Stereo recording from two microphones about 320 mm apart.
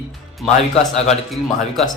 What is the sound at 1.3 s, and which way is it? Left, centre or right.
Speech, centre.